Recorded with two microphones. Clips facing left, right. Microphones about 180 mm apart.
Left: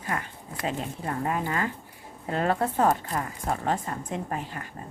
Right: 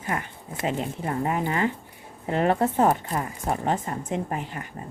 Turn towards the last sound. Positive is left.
turn(degrees=-25)  # may be behind; listen again after turning